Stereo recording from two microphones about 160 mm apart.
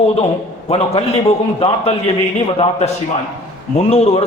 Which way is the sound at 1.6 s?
35° left (ahead or behind).